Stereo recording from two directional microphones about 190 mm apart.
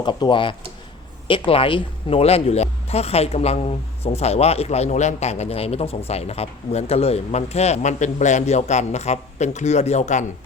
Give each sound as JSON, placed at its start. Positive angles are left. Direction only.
{"t": 0.0, "sound": "speech", "side_deg": 25}